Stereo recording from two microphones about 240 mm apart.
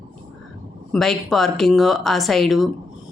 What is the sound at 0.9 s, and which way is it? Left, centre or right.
Speech, centre.